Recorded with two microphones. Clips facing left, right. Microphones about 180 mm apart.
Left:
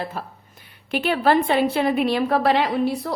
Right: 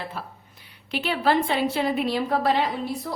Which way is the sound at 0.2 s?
45° left (ahead or behind).